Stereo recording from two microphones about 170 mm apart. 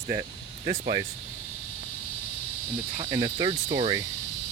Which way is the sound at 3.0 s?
25° right (ahead or behind).